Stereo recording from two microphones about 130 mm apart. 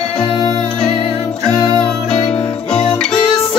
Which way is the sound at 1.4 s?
5° left (ahead or behind).